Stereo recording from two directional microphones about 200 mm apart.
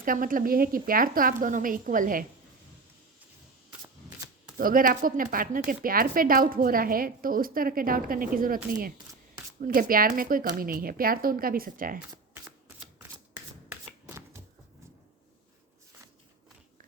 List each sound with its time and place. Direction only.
0.0 s speech: 45° right (ahead or behind)
4.5 s speech: 45° right (ahead or behind)
13.7 s shuffling cards: 15° right (ahead or behind)